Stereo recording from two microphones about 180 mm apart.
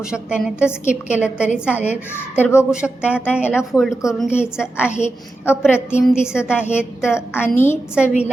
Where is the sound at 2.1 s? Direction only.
15° left (ahead or behind).